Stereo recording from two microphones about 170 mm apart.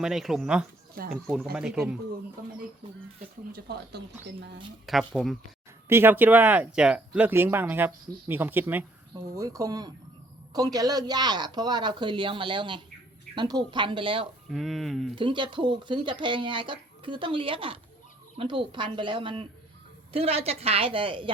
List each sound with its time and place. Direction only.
0.0 s speech: centre (ahead or behind)
3.2 s speech: 65° right (ahead or behind)
4.9 s speech: centre (ahead or behind)
5.9 s speech: 10° right (ahead or behind); by 14.3 s 30° right (ahead or behind)
14.5 s speech: centre (ahead or behind)
15.1 s a woman's voice: 30° right (ahead or behind)